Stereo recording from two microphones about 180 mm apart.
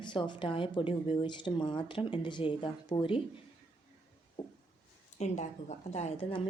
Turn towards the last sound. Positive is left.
turn(degrees=35)  # may be behind; listen again after turning